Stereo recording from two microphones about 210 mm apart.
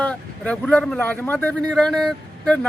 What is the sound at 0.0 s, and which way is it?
A man's voice, 5° left (ahead or behind).